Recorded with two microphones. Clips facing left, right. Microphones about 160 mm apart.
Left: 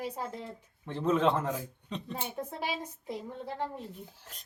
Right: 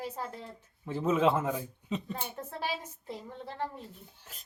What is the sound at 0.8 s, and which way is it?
A man's voice, 5° right (ahead or behind).